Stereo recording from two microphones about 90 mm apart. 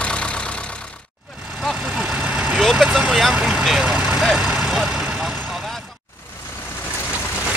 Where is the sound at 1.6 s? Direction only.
Centre (ahead or behind).